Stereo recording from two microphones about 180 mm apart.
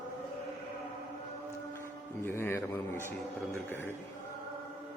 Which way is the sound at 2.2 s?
10° left (ahead or behind).